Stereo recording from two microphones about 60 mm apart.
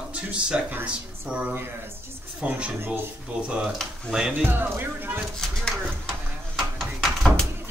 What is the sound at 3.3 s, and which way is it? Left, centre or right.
Speech, centre.